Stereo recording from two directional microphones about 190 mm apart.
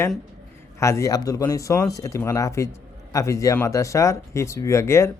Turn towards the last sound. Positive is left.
turn(degrees=15)  # may be behind; listen again after turning